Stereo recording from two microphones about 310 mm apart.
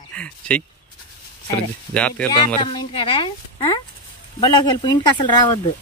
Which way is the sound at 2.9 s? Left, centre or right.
Centre.